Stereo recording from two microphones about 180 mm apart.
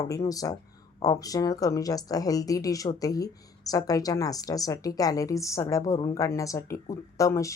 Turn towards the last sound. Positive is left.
turn(degrees=15)  # may be behind; listen again after turning